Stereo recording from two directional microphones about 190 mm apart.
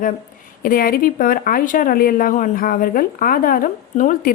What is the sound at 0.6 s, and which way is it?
A woman's voice, 50° left (ahead or behind).